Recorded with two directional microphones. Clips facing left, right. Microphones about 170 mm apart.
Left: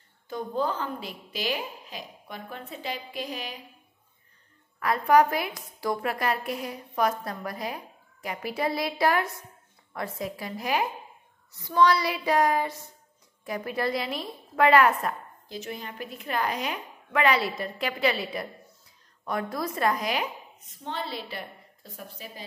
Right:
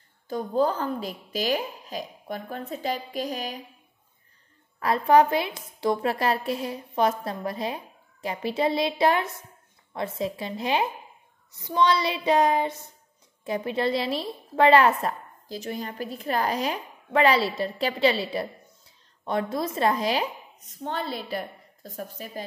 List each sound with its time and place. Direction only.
0.3 s a woman's voice: 40° right (ahead or behind)
4.7 s a woman's voice: 30° right (ahead or behind)
20.8 s a woman's voice: 45° right (ahead or behind)